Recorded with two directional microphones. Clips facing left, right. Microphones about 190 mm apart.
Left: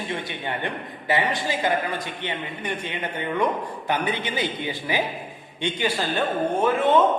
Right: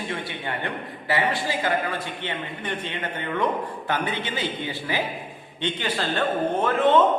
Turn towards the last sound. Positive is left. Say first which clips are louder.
# even
turn(degrees=10)  # may be behind; listen again after turning